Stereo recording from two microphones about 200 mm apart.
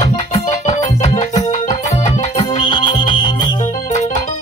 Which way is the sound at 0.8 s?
30° left (ahead or behind).